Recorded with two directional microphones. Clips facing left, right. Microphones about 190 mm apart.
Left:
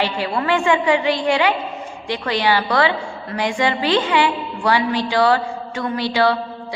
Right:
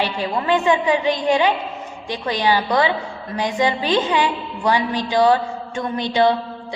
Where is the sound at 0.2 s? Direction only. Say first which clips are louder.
Even; 15° right (ahead or behind).